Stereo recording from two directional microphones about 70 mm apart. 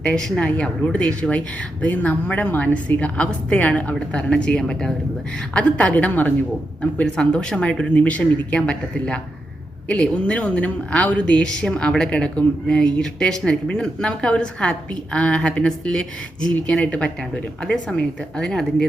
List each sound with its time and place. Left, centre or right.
0.0 s a woman's voice: centre
7.0 s a woman's voice: centre